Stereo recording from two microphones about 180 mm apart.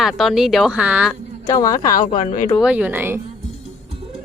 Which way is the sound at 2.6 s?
10° right (ahead or behind).